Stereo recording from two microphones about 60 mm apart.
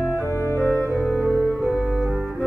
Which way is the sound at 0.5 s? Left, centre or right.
Left.